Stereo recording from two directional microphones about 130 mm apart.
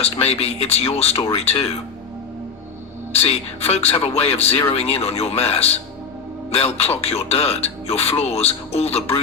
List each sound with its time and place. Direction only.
0.0 s speech: 50° left (ahead or behind)
3.1 s speech: 50° left (ahead or behind)